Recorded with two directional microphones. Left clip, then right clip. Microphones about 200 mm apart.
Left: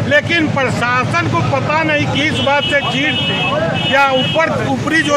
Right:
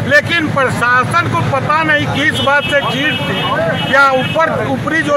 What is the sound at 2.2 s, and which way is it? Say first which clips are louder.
Speech: right 3 dB; 5° left (ahead or behind).